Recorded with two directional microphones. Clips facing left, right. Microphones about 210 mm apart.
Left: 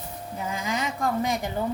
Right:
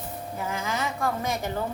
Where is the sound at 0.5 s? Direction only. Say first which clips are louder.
Left 1 dB; 15° left (ahead or behind).